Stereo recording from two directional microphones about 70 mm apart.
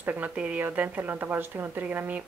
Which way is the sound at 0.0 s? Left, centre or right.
Right.